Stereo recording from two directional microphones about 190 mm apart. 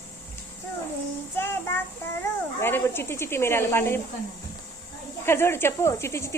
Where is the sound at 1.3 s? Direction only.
10° left (ahead or behind).